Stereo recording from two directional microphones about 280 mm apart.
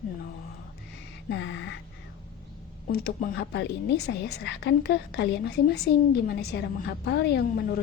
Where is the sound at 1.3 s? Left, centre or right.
Left.